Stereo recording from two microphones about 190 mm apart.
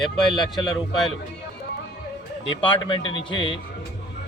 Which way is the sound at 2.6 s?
25° left (ahead or behind).